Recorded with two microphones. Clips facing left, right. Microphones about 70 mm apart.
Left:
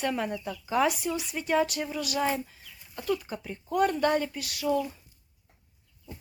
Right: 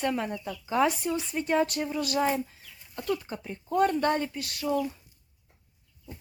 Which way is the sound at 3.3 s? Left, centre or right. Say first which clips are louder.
Even; centre.